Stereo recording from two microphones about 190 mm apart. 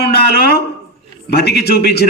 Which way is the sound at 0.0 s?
60° left (ahead or behind).